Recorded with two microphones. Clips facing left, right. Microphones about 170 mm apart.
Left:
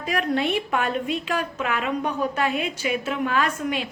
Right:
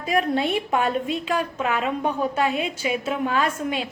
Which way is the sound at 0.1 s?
25° right (ahead or behind).